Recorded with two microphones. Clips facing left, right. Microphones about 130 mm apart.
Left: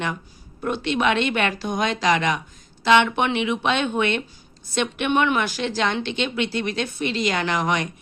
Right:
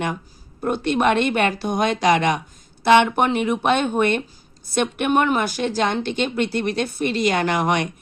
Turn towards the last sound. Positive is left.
turn(degrees=-50)  # may be behind; listen again after turning